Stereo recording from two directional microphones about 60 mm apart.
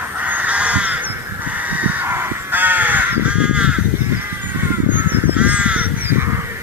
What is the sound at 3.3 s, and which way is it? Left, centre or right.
Crow, centre.